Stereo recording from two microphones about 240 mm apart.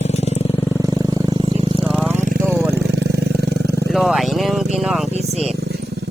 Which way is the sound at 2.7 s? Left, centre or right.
Right.